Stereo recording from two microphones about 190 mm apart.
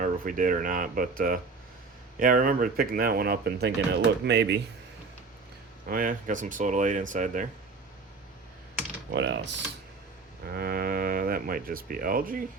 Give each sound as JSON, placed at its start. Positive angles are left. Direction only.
{"t": 0.0, "sound": "speech", "side_deg": -45}
{"t": 5.8, "sound": "speech", "side_deg": -45}
{"t": 9.1, "sound": "speech", "side_deg": -70}
{"t": 10.4, "sound": "speech", "side_deg": -50}